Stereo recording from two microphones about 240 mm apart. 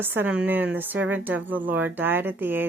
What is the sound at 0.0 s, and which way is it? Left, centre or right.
A woman's voice, centre.